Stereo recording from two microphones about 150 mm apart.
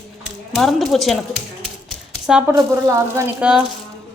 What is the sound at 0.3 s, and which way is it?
Typewriter, centre (ahead or behind).